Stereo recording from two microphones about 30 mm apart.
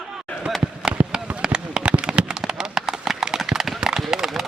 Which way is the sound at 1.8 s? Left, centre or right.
Right.